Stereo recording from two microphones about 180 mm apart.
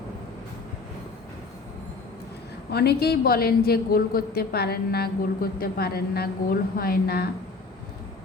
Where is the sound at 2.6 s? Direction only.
65° left (ahead or behind).